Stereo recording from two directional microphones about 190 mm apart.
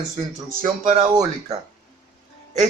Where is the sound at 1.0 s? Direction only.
20° right (ahead or behind).